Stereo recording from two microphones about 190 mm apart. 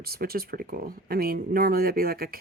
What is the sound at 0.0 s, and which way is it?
Speech, 55° right (ahead or behind).